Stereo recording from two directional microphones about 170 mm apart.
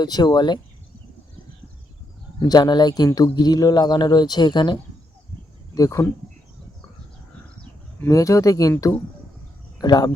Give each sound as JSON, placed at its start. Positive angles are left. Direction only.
{"t": 0.0, "sound": "speech", "side_deg": 25}
{"t": 2.4, "sound": "speech", "side_deg": 25}
{"t": 8.0, "sound": "speech", "side_deg": 20}